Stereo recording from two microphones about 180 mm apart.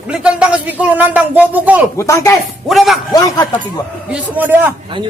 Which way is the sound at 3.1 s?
20° left (ahead or behind).